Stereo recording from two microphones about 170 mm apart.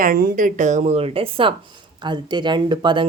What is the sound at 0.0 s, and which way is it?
Speech, 55° right (ahead or behind).